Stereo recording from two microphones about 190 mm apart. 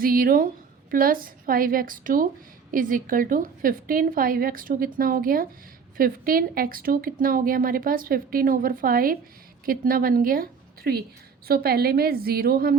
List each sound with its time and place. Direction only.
0.0 s a woman's voice: 50° right (ahead or behind)